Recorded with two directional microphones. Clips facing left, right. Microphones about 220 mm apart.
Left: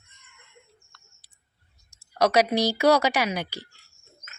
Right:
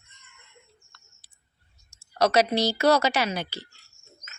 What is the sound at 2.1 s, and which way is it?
A woman's voice, 10° left (ahead or behind).